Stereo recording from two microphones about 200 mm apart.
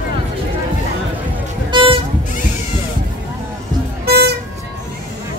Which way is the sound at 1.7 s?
25° right (ahead or behind).